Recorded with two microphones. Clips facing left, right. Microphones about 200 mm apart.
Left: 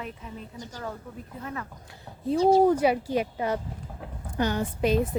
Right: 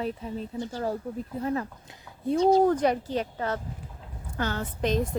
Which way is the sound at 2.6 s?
10° left (ahead or behind).